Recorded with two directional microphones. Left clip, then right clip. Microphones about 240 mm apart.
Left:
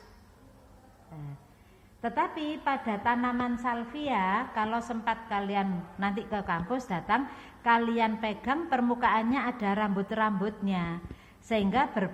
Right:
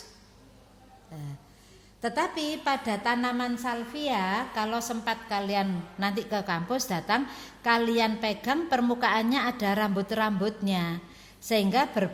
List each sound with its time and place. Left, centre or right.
2.0 s a woman's voice: right